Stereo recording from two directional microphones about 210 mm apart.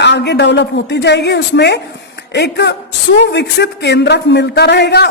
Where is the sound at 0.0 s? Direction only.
55° left (ahead or behind).